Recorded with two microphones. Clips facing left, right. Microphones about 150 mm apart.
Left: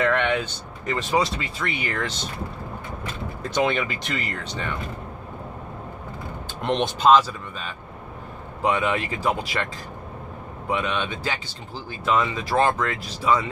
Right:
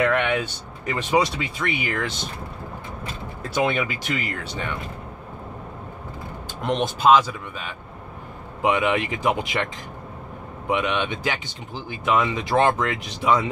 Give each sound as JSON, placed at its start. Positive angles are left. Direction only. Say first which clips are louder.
{"t": 0.0, "sound": "speech", "louder": "right 1 dB", "side_deg": -10}
{"t": 1.8, "sound": "speech", "louder": "right 1 dB", "side_deg": -5}
{"t": 3.4, "sound": "speech", "louder": "even", "side_deg": -5}
{"t": 6.6, "sound": "speech", "louder": "even", "side_deg": -5}
{"t": 10.7, "sound": "speech", "louder": "right 2 dB", "side_deg": -15}